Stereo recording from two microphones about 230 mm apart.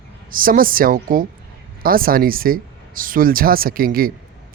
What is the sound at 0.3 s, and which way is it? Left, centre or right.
A man's voice, right.